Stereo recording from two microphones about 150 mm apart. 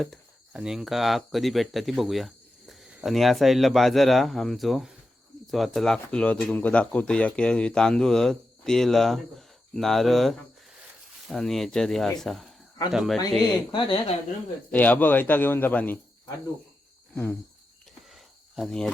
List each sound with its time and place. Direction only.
0.0 s speech: centre (ahead or behind)
13.7 s a woman's voice: 30° left (ahead or behind)
14.7 s a man's voice: 10° left (ahead or behind)
18.1 s cricket: centre (ahead or behind)